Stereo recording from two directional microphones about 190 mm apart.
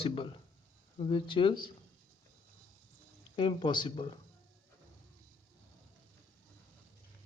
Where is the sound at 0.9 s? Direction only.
25° left (ahead or behind).